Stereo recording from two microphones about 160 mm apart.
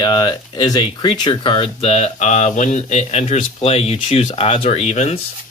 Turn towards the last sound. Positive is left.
turn(degrees=40)  # may be behind; listen again after turning